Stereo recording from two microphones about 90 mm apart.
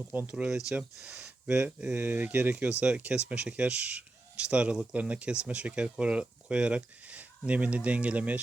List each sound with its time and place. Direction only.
0.1 s speech: 20° right (ahead or behind)
1.5 s speech: 20° right (ahead or behind)